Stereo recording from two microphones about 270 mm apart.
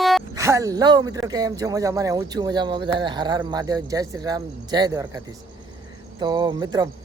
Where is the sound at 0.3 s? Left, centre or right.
Centre.